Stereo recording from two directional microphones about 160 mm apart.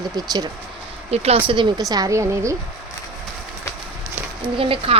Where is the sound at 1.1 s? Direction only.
40° right (ahead or behind).